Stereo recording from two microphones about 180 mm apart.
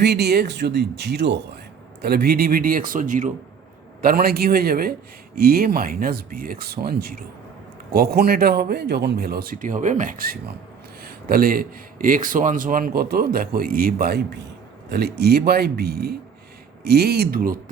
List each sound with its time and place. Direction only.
0.0 s a man's voice: 65° right (ahead or behind)